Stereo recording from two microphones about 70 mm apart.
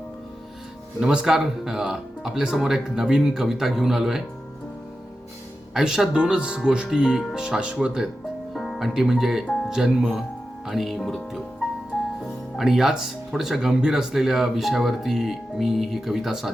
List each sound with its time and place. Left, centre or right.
0.9 s speech: centre
5.7 s speech: centre
8.5 s music: centre
8.9 s speech: centre